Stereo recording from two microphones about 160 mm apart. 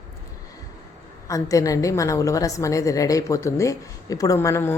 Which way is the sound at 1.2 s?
20° left (ahead or behind).